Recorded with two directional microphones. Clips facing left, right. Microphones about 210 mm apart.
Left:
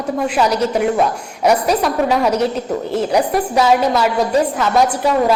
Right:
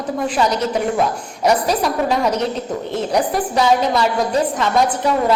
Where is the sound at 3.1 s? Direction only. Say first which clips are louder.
Left 1 dB; 5° left (ahead or behind).